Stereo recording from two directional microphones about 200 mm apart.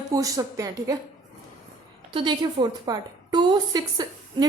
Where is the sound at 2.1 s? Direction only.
25° right (ahead or behind).